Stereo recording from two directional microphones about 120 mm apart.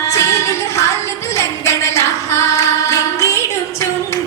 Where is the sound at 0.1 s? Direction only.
25° left (ahead or behind).